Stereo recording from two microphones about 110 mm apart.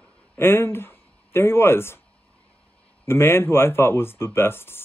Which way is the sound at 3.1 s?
20° left (ahead or behind).